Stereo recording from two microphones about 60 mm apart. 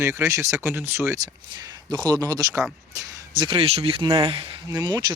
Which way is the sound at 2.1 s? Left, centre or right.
Right.